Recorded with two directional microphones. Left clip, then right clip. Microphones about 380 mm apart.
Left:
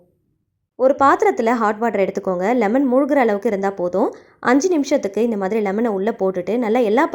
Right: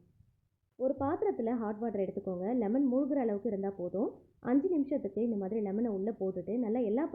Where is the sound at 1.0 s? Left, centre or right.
Centre.